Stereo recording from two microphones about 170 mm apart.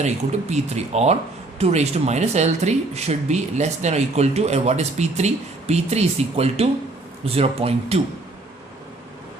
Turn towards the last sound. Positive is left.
turn(degrees=-35)  # may be behind; listen again after turning